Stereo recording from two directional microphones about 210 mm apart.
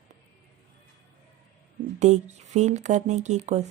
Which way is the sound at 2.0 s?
35° right (ahead or behind).